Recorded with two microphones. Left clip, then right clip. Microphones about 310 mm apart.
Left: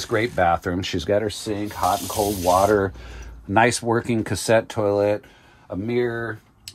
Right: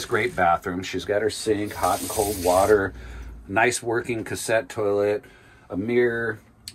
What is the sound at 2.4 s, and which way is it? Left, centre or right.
Speech, left.